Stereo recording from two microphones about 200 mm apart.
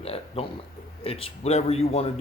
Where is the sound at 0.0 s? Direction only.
30° left (ahead or behind).